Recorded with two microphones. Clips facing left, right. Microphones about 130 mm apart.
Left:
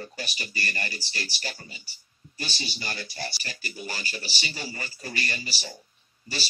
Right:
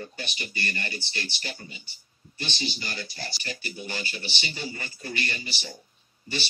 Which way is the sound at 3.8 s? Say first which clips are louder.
Left 1 dB; 40° left (ahead or behind).